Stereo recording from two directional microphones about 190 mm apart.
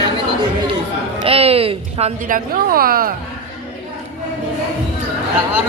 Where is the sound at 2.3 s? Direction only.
50° right (ahead or behind).